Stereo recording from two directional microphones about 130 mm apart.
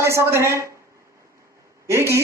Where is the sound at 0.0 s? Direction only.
20° right (ahead or behind).